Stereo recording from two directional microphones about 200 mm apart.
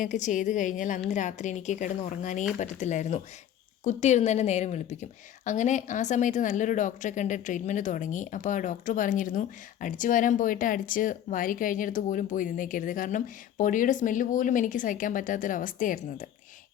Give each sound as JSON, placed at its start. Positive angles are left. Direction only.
{"t": 0.0, "sound": "speech", "side_deg": 40}